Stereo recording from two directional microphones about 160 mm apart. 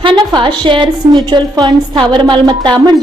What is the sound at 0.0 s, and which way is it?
A woman's voice, 30° right (ahead or behind).